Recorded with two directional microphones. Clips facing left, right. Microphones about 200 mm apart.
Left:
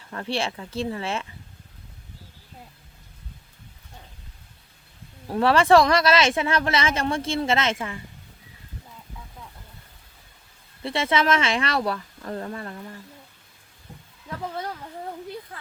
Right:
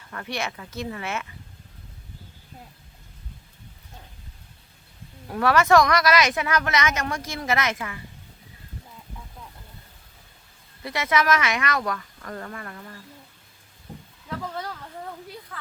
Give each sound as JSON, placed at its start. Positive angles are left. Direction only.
{"t": 0.1, "sound": "speech", "side_deg": 30}
{"t": 5.3, "sound": "speech", "side_deg": 30}
{"t": 10.8, "sound": "speech", "side_deg": 30}